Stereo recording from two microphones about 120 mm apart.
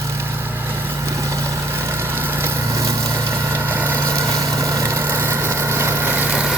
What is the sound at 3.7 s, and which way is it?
Vehicle, 15° right (ahead or behind).